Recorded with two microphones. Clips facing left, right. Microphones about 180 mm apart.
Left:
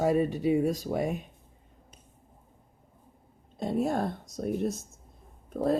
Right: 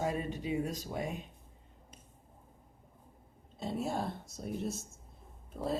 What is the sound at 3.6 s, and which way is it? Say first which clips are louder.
Speech: left 7 dB; 55° left (ahead or behind).